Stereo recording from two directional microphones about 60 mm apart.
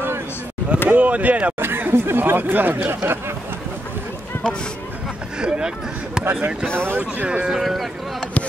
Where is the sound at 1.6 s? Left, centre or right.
Right.